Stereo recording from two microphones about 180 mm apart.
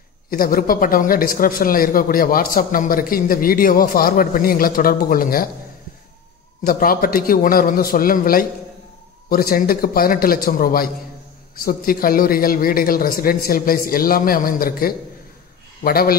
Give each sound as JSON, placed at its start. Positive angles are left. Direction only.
{"t": 0.3, "sound": "speech", "side_deg": 55}
{"t": 6.6, "sound": "speech", "side_deg": 55}